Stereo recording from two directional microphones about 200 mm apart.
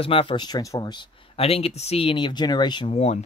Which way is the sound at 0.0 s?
25° left (ahead or behind).